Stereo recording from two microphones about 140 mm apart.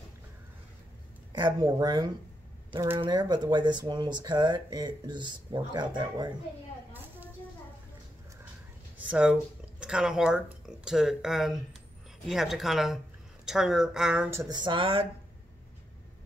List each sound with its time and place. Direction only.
1.3 s a woman's voice: 30° right (ahead or behind)
8.9 s speech: 10° right (ahead or behind)
14.3 s speech: 25° right (ahead or behind)